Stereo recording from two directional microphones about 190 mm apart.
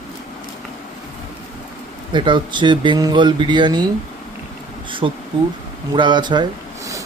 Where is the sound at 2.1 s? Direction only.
25° right (ahead or behind).